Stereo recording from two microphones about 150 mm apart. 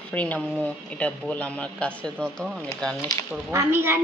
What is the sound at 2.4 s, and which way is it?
Speech, 5° right (ahead or behind).